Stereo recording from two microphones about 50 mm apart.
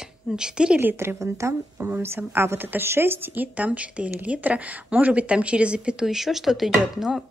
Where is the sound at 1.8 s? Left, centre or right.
Right.